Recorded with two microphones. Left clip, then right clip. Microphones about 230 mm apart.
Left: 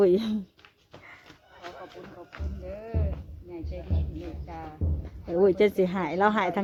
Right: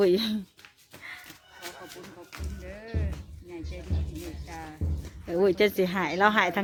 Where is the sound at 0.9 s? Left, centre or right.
Right.